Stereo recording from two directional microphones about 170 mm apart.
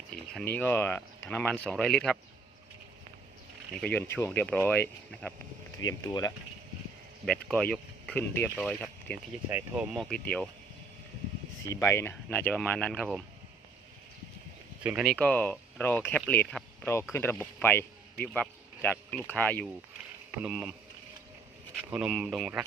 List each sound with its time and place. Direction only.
0.4 s speech: 10° left (ahead or behind)
3.8 s speech: 15° left (ahead or behind)
5.8 s speech: 20° left (ahead or behind)
7.3 s speech: 5° left (ahead or behind)
9.5 s speech: 10° right (ahead or behind)
9.9 s speech: 5° left (ahead or behind)
11.6 s speech: 15° left (ahead or behind)
15.0 s speech: 5° left (ahead or behind)
20.4 s speech: 5° right (ahead or behind)
21.8 s speech: 5° right (ahead or behind)